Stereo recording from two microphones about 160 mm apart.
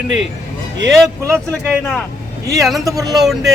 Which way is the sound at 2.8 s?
20° right (ahead or behind).